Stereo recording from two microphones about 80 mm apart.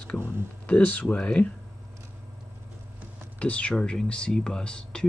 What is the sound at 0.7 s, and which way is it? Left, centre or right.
Speech, centre.